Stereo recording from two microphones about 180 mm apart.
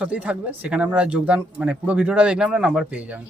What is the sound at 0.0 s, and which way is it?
Speech, 5° right (ahead or behind).